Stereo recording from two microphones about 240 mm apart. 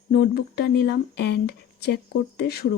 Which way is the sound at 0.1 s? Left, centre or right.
Left.